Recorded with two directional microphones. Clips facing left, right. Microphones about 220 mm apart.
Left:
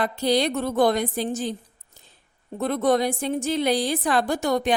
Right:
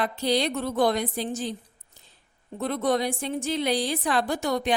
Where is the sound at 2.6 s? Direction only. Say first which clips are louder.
Left 4 dB; 50° left (ahead or behind).